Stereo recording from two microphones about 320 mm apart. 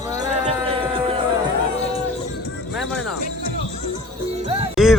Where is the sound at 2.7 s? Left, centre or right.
Centre.